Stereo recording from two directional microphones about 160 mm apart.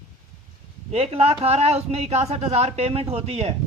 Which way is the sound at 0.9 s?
40° right (ahead or behind).